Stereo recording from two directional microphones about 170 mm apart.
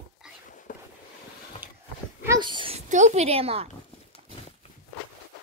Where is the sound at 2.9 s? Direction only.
45° right (ahead or behind).